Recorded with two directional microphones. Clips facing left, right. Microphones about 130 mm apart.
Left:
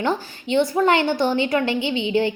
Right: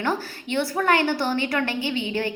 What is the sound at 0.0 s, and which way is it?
A woman's voice, 20° left (ahead or behind).